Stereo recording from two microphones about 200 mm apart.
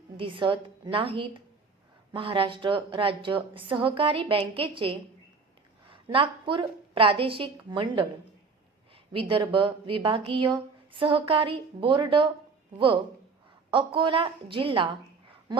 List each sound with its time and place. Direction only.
0.2 s speech: 25° right (ahead or behind)
9.1 s speech: 25° right (ahead or behind)
13.7 s speech: 25° right (ahead or behind)